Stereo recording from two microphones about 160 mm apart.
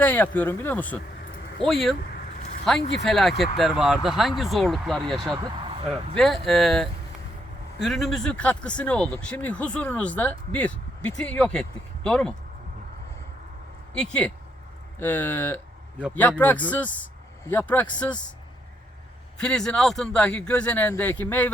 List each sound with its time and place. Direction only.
0.0 s speech: 10° left (ahead or behind)
3.0 s speech: centre (ahead or behind)
5.4 s speech: 30° right (ahead or behind)
5.9 s speech: centre (ahead or behind)
13.9 s speech: 5° left (ahead or behind)
19.4 s speech: 5° left (ahead or behind)